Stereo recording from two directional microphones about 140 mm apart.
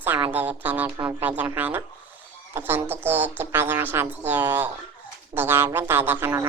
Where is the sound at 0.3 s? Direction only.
10° right (ahead or behind).